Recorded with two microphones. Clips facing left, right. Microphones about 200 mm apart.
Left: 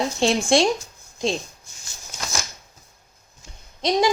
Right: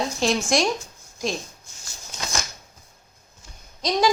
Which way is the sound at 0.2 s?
30° left (ahead or behind).